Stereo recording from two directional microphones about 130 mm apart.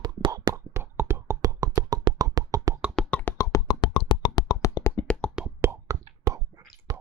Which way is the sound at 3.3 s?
30° left (ahead or behind).